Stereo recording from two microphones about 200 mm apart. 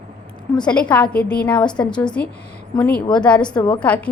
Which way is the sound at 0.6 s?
5° left (ahead or behind).